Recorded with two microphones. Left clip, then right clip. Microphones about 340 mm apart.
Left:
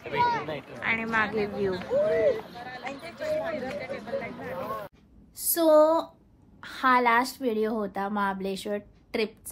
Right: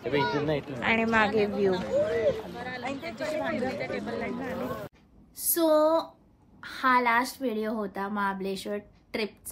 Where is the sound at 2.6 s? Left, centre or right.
Centre.